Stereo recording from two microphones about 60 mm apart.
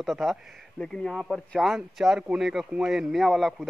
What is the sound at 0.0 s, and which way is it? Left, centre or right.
A man's voice, centre.